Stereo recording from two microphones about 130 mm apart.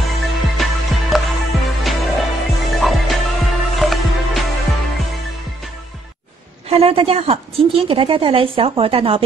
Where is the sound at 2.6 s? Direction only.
Centre (ahead or behind).